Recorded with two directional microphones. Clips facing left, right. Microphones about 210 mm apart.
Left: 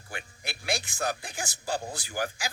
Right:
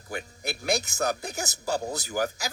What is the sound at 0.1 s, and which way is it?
A man's voice, 40° right (ahead or behind).